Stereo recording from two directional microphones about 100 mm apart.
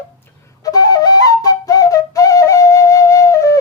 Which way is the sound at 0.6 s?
40° left (ahead or behind).